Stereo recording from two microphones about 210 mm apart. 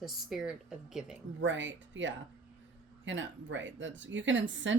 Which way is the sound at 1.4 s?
60° right (ahead or behind).